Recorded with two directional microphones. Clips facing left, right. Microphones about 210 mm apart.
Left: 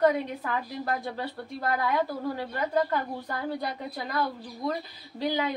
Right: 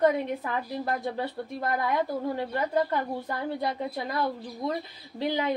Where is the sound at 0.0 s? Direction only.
20° right (ahead or behind).